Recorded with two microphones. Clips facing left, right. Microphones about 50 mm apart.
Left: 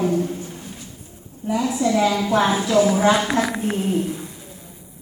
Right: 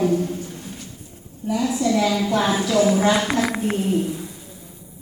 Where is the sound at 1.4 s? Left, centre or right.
Left.